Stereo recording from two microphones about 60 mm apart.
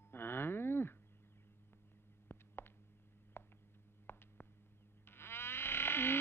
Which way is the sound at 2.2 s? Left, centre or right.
Left.